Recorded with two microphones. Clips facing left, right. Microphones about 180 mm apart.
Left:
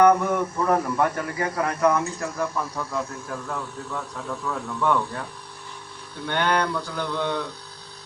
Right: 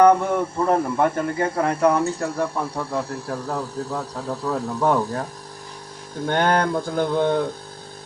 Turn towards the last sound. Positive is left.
turn(degrees=-50)  # may be behind; listen again after turning